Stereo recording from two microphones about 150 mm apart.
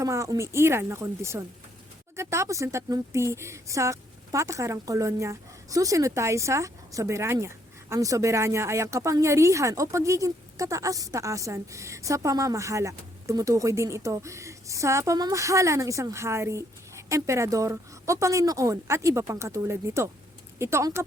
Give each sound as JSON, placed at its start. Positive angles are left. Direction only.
{"t": 0.0, "sound": "a woman's voice", "side_deg": -20}